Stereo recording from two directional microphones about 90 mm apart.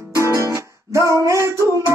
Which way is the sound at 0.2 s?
35° right (ahead or behind).